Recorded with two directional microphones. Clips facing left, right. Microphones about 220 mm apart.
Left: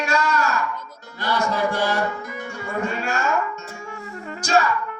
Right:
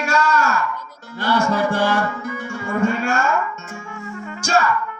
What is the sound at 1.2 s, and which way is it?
Music, 50° right (ahead or behind).